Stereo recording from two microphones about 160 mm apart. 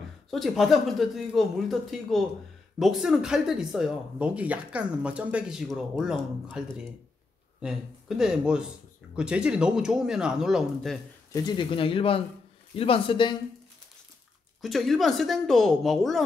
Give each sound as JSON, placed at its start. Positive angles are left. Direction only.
{"t": 0.3, "sound": "speech", "side_deg": 0}
{"t": 8.2, "sound": "speech", "side_deg": -5}
{"t": 11.3, "sound": "speech", "side_deg": 25}
{"t": 14.6, "sound": "speech", "side_deg": 0}